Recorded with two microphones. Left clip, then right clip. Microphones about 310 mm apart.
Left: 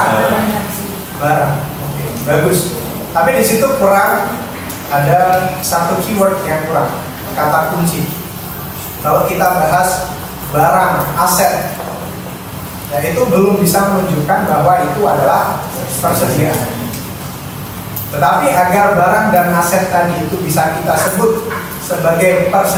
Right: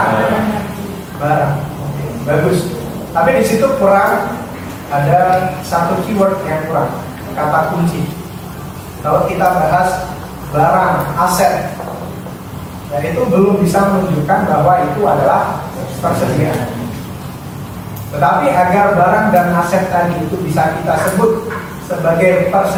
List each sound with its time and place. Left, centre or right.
0.0 s a sound: centre
2.3 s a man's voice: centre
9.0 s a man's voice: centre
13.3 s a man's voice: centre
18.2 s a man's voice: centre